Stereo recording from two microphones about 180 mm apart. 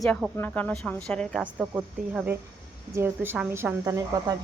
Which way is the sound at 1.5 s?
10° right (ahead or behind).